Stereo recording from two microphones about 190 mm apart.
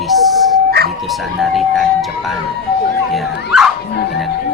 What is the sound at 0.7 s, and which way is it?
Siren, 55° right (ahead or behind).